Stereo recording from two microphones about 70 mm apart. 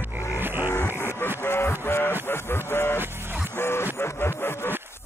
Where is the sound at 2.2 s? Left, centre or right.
Left.